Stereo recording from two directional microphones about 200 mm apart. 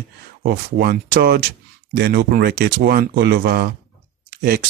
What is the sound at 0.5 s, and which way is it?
Speech, 50° right (ahead or behind).